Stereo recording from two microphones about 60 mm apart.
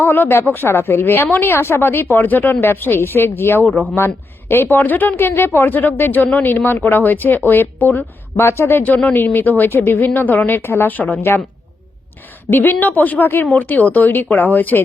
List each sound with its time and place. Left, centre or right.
0.0 s a woman's voice: left
4.8 s a woman's voice: left
6.6 s speech: left
7.0 s a woman's voice: left
12.5 s a woman's voice: left
13.2 s a woman's voice: left
13.5 s a woman's voice: left